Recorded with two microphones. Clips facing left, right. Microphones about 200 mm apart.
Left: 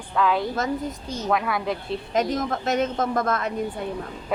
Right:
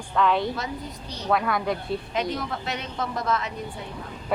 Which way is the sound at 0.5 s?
45° left (ahead or behind).